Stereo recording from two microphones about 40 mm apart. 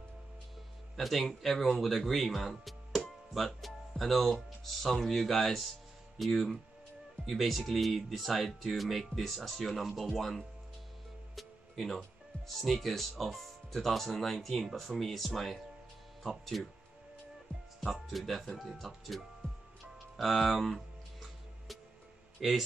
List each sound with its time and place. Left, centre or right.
0.9 s speech: centre
11.3 s music: centre
12.4 s speech: centre
18.1 s speech: centre
20.6 s music: centre
22.4 s speech: centre